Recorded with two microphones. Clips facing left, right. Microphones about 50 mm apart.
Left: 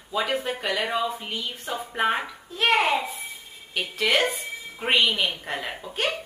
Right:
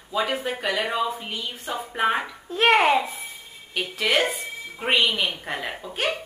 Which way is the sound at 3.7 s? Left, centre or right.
Centre.